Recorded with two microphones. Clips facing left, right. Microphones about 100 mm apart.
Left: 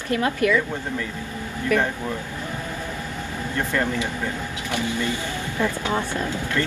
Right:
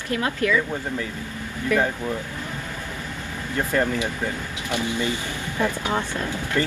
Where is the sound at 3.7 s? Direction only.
20° right (ahead or behind).